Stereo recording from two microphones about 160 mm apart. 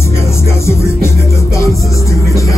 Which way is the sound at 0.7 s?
15° left (ahead or behind).